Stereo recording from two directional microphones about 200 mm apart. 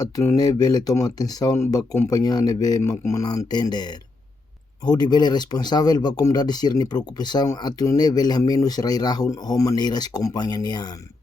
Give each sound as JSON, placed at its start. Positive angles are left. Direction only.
{"t": 0.0, "sound": "speech", "side_deg": 15}